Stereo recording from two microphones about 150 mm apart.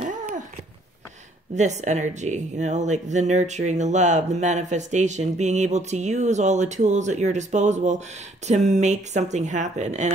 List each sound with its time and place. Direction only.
1.5 s speech: 50° right (ahead or behind)